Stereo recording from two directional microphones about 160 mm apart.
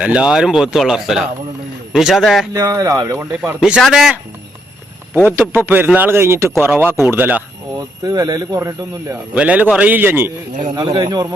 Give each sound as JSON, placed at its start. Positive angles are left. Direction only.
{"t": 0.0, "sound": "speech", "side_deg": -5}
{"t": 2.5, "sound": "speech", "side_deg": -20}
{"t": 3.8, "sound": "speech", "side_deg": 0}
{"t": 5.1, "sound": "a man's voice", "side_deg": -15}
{"t": 7.8, "sound": "speech", "side_deg": -25}
{"t": 9.3, "sound": "a man's voice", "side_deg": -10}
{"t": 10.6, "sound": "speech", "side_deg": -30}